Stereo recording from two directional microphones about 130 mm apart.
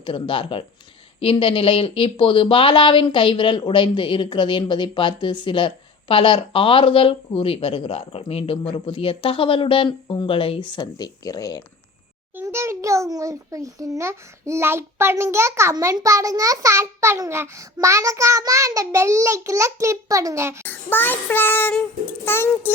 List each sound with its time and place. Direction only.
0.0 s speech: 40° left (ahead or behind)
12.4 s a child's voice: 20° right (ahead or behind)
20.7 s child singing: 15° left (ahead or behind)